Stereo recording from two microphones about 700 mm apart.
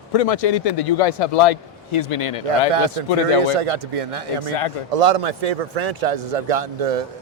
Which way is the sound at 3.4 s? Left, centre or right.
Right.